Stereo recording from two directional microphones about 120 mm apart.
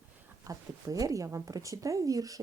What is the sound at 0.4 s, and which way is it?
Speech, 30° right (ahead or behind).